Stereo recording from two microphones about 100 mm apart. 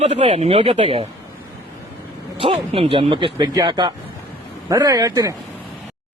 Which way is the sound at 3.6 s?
50° right (ahead or behind).